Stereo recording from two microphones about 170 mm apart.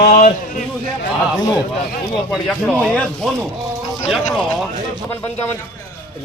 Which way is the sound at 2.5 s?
10° left (ahead or behind).